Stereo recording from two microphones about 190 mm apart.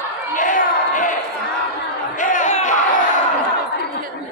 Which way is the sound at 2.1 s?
45° left (ahead or behind).